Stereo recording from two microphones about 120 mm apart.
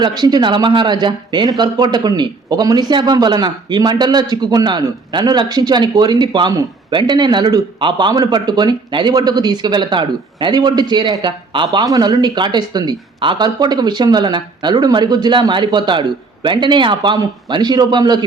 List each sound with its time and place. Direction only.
0.0 s speech: 35° right (ahead or behind)